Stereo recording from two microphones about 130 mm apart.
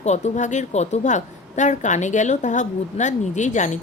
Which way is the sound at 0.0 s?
65° left (ahead or behind).